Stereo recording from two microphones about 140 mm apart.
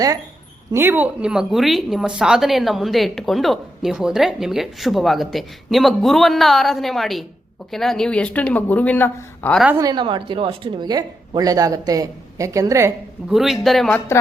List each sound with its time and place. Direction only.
0.7 s a woman's voice: 15° right (ahead or behind); by 9.6 s 15° left (ahead or behind)
9.7 s a woman's voice: 30° right (ahead or behind)
13.3 s a woman's voice: centre (ahead or behind)